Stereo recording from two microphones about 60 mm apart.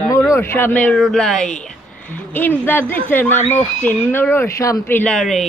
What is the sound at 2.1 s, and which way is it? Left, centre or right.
Speech, left.